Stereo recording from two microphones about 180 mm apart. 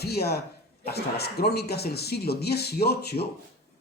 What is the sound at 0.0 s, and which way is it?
Speech, 60° left (ahead or behind).